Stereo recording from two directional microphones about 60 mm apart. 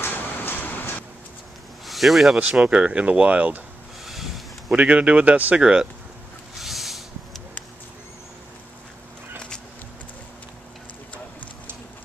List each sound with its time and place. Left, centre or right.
0.0 s vehicle: left
1.9 s speech: centre
2.3 s speech: centre
4.0 s a sound: centre
4.6 s speech: right
6.6 s a sound: centre